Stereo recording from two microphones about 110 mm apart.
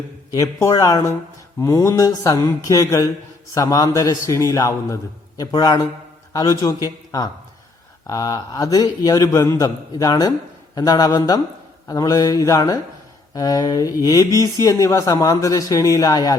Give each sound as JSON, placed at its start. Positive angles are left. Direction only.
{"t": 0.3, "sound": "a man's voice", "side_deg": 30}
{"t": 8.0, "sound": "a man's voice", "side_deg": 30}